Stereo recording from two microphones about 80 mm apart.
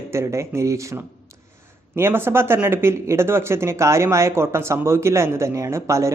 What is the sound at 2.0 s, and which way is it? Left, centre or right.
Speech, right.